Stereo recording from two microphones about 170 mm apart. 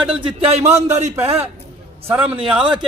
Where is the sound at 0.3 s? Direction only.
40° right (ahead or behind).